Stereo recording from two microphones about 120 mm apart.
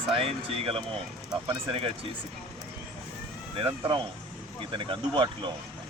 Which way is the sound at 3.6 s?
45° right (ahead or behind).